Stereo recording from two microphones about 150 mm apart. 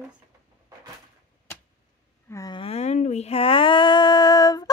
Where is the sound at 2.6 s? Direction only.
45° left (ahead or behind).